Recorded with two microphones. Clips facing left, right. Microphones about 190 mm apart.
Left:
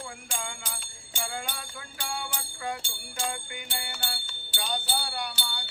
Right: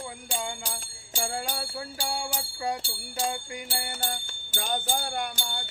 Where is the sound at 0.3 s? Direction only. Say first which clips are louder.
Right 6 dB; 35° right (ahead or behind).